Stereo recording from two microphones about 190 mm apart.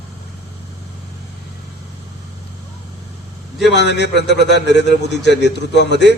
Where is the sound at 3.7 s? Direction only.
65° left (ahead or behind).